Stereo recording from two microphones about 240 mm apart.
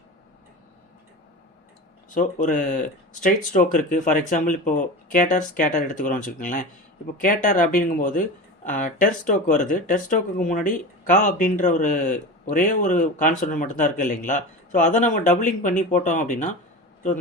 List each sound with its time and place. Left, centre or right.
2.0 s speech: left